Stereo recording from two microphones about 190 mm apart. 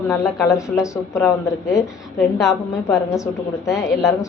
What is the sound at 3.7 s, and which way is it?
Speech, 15° left (ahead or behind).